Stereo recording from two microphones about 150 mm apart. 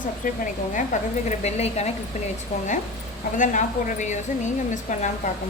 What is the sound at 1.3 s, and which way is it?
Speech, 50° left (ahead or behind).